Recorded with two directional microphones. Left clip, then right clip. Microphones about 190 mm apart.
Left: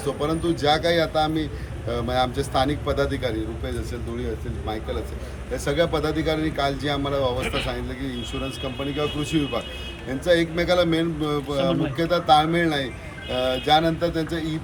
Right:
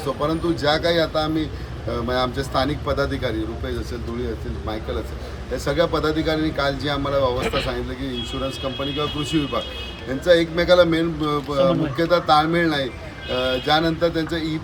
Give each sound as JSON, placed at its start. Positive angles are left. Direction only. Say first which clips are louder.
{"t": 0.2, "sound": "speech", "louder": "right 2 dB", "side_deg": 0}
{"t": 5.6, "sound": "speech", "louder": "right 2 dB", "side_deg": 0}
{"t": 7.4, "sound": "a man's voice", "louder": "right 3 dB", "side_deg": -50}
{"t": 9.0, "sound": "speech", "louder": "even", "side_deg": 0}
{"t": 11.5, "sound": "speech", "louder": "right 5 dB", "side_deg": -15}
{"t": 11.9, "sound": "speech", "louder": "even", "side_deg": 0}